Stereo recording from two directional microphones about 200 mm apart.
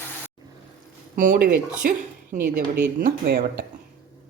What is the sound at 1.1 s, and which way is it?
A woman's voice, 40° right (ahead or behind).